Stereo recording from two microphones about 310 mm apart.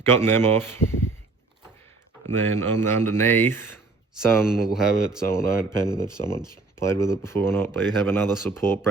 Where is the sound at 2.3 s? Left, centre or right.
Centre.